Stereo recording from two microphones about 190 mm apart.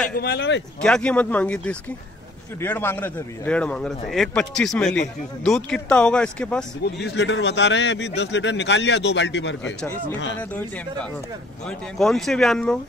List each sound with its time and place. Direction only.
0.1 s speech: 60° left (ahead or behind)
0.8 s speech: 5° left (ahead or behind)
7.1 s a man's voice: 70° left (ahead or behind)
12.0 s speech: centre (ahead or behind)